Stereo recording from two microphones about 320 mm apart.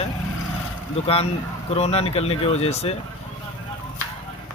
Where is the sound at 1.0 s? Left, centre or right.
Centre.